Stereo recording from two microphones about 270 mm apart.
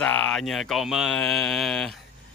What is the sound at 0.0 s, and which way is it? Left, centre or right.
Speech, centre.